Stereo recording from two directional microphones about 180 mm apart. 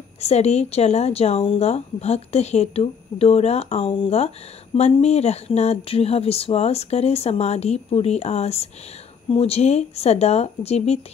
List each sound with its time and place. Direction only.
0.2 s speech: 35° left (ahead or behind)